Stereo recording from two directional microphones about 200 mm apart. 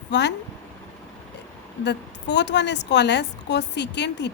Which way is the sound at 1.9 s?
60° left (ahead or behind).